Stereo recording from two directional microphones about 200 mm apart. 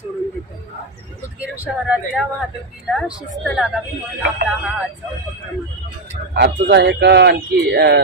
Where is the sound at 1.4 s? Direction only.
5° right (ahead or behind).